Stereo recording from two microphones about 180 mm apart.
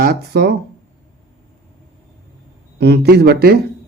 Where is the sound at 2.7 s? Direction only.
65° right (ahead or behind).